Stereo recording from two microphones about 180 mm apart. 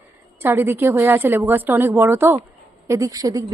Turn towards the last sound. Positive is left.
turn(degrees=-20)  # may be behind; listen again after turning